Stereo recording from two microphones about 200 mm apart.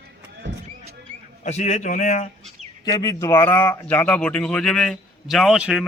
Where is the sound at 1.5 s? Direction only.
35° left (ahead or behind).